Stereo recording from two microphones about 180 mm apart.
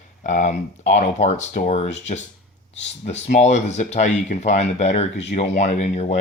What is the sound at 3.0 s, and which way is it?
Speech, 40° left (ahead or behind).